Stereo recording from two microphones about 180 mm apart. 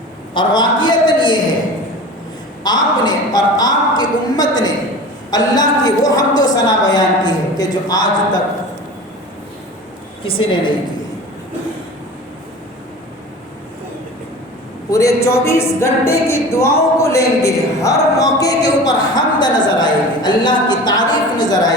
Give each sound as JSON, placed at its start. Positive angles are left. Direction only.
{"t": 0.3, "sound": "a man's voice", "side_deg": 25}
{"t": 2.6, "sound": "a sound", "side_deg": 25}
{"t": 5.3, "sound": "a woman's voice", "side_deg": 20}
{"t": 10.2, "sound": "a woman's voice", "side_deg": 30}
{"t": 14.8, "sound": "a sound", "side_deg": 15}
{"t": 21.3, "sound": "a woman's voice", "side_deg": 20}